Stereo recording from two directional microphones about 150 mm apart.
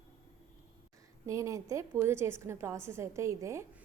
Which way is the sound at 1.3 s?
20° right (ahead or behind).